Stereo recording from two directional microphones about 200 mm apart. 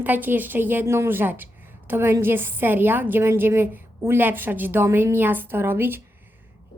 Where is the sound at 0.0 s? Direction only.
10° right (ahead or behind).